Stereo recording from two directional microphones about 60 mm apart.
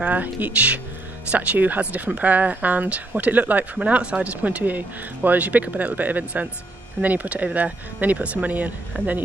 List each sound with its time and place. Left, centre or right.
0.0 s speech: right